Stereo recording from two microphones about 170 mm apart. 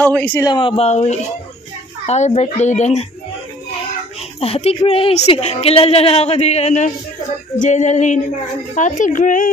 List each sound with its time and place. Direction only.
0.0 s speech: 10° left (ahead or behind)
0.5 s a woman's voice: 30° left (ahead or behind)
4.4 s a woman's voice: 35° left (ahead or behind); by 9.5 s 50° left (ahead or behind)